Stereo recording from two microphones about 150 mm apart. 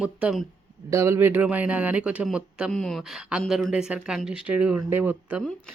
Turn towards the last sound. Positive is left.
turn(degrees=-10)  # may be behind; listen again after turning